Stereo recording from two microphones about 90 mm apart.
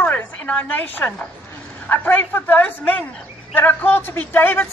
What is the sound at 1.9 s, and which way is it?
A man's voice, 20° left (ahead or behind).